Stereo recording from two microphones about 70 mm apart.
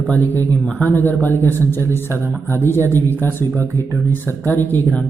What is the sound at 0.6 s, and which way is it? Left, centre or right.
Speech, left.